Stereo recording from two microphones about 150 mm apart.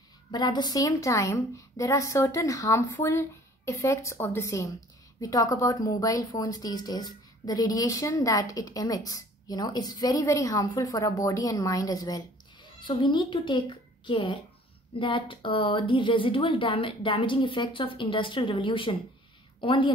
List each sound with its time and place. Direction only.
0.3 s a woman's voice: 30° left (ahead or behind)